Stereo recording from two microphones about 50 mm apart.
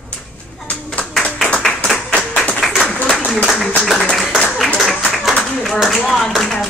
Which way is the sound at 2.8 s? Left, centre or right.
Left.